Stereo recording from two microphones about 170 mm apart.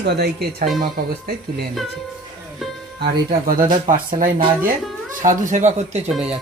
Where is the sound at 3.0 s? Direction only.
65° right (ahead or behind); by 6.0 s 40° right (ahead or behind).